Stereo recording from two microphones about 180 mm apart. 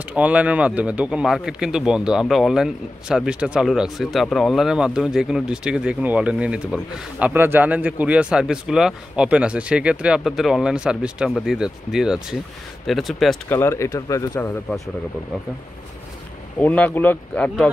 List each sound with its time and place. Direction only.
0.1 s speech: 5° right (ahead or behind)
13.5 s speech: 15° left (ahead or behind)
16.5 s speech: 10° left (ahead or behind)